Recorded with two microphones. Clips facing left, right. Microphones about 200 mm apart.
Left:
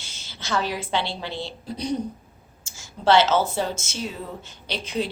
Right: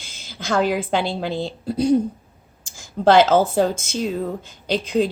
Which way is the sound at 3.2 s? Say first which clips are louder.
Right 6 dB; 50° right (ahead or behind).